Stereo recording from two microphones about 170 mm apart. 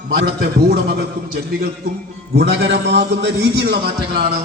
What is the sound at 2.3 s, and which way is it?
A man's voice, 90° right.